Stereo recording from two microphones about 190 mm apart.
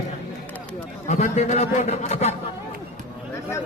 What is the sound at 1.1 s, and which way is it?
A man's voice, 35° left (ahead or behind).